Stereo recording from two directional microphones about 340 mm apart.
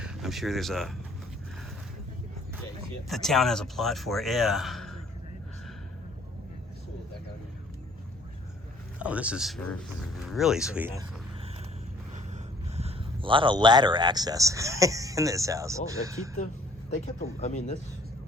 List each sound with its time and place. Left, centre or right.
0.0 s speech: centre
3.1 s speech: centre
9.0 s speech: centre
12.7 s speech: centre
16.9 s speech: left